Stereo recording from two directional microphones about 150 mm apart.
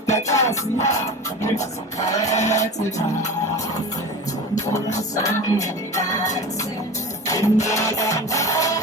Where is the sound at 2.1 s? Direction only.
20° left (ahead or behind).